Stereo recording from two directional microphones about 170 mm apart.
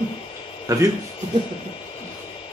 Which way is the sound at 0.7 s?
20° right (ahead or behind).